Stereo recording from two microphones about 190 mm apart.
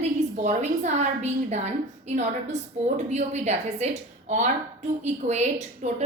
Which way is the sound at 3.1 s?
35° right (ahead or behind).